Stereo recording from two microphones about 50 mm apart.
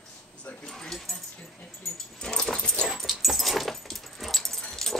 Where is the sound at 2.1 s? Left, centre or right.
Centre.